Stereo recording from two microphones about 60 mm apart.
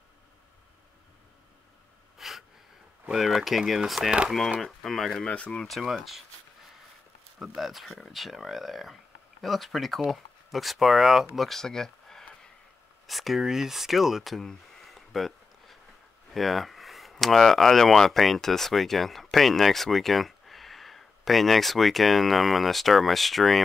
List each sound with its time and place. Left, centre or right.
2.1 s wheeze: centre
3.1 s speech: centre
5.3 s speech: left
5.6 s speech: centre
7.3 s speech: centre